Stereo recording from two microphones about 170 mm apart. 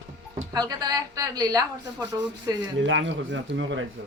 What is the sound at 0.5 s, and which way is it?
A woman's voice, 25° right (ahead or behind).